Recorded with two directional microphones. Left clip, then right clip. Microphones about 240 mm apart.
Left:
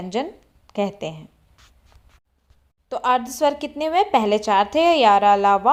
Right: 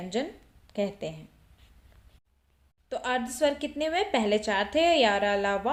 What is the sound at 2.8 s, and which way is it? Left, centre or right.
A woman's voice, left.